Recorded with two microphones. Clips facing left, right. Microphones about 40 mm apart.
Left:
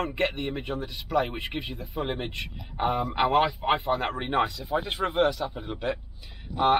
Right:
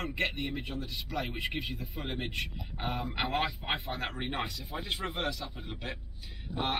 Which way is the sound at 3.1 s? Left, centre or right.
Left.